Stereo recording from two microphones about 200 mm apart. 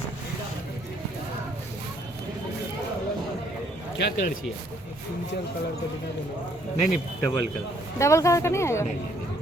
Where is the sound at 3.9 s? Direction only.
60° left (ahead or behind).